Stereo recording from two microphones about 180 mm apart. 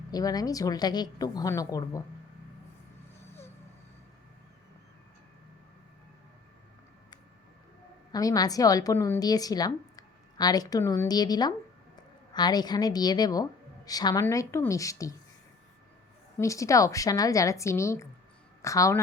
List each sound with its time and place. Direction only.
0.1 s a woman's voice: 20° left (ahead or behind)
8.1 s a woman's voice: 20° left (ahead or behind)
16.4 s a woman's voice: 15° left (ahead or behind)